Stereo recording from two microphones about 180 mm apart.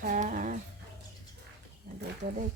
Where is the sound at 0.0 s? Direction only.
45° right (ahead or behind).